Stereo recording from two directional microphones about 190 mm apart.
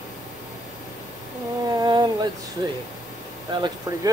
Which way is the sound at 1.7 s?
20° right (ahead or behind).